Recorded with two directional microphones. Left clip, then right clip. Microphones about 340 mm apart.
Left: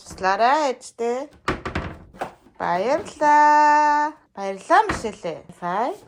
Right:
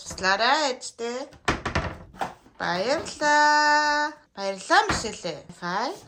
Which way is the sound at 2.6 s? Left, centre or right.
Centre.